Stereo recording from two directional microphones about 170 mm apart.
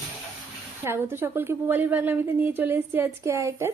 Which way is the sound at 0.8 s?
15° right (ahead or behind).